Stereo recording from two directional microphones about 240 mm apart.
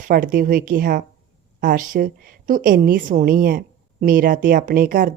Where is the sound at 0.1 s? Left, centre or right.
Right.